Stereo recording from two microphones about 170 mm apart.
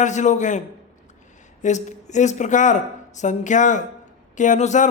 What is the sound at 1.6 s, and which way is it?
Speech, 45° left (ahead or behind).